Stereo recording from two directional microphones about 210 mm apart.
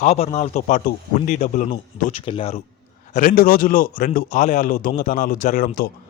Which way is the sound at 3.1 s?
40° left (ahead or behind).